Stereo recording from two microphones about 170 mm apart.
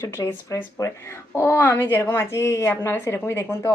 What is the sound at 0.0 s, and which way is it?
A woman's voice, 15° left (ahead or behind).